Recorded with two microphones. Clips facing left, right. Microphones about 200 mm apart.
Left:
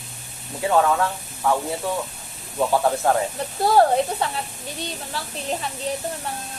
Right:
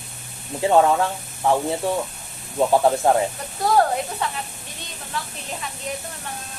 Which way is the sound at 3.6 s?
30° left (ahead or behind).